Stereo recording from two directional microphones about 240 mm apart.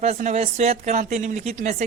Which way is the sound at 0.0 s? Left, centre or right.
Right.